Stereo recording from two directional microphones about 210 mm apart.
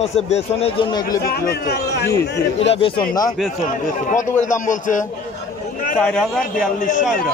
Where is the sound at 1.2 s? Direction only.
45° left (ahead or behind).